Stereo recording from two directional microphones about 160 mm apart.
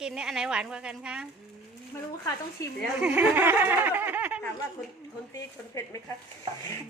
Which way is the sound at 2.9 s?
10° right (ahead or behind).